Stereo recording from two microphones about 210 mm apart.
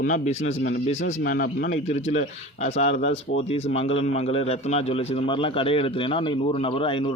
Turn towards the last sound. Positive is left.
turn(degrees=25)  # may be behind; listen again after turning